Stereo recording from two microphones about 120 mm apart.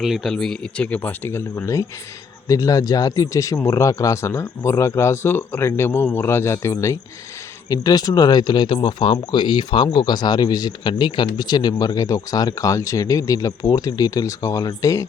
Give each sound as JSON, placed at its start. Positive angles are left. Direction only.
{"t": 0.0, "sound": "speech", "side_deg": 0}